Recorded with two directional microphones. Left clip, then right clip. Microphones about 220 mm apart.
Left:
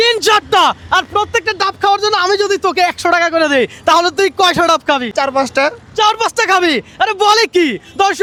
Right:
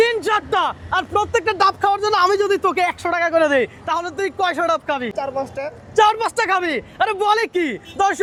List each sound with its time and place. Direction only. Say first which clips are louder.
0.1 s speech: left 8 dB; 45° left (ahead or behind); by 1.7 s 15° left (ahead or behind)
1.8 s speech: left 4 dB; 30° left (ahead or behind)
3.8 s speech: left 11 dB; 45° left (ahead or behind); by 8.2 s 30° left (ahead or behind)